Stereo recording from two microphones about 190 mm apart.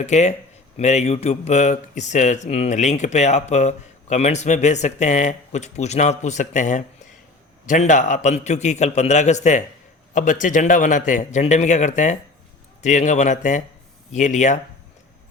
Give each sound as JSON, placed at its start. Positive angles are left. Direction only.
{"t": 0.0, "sound": "speech", "side_deg": 35}